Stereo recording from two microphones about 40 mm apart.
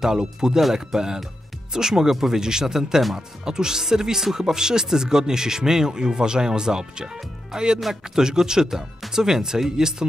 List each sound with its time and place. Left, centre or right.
0.0 s speech: centre